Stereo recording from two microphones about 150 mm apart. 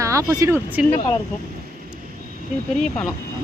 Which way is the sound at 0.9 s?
35° left (ahead or behind).